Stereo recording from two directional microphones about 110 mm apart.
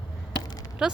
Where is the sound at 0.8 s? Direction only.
5° right (ahead or behind).